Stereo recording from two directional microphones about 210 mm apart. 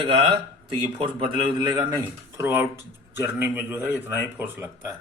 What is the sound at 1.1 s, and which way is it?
Speech, 25° right (ahead or behind).